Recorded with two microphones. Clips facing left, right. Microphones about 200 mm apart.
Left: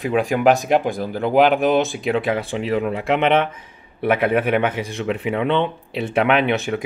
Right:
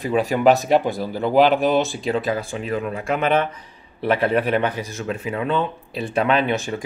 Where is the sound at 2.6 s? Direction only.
25° left (ahead or behind).